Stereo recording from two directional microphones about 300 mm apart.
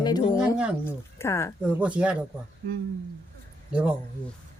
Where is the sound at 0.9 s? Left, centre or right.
Centre.